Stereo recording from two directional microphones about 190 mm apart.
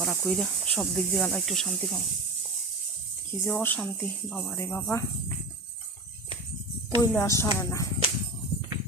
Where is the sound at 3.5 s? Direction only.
10° left (ahead or behind).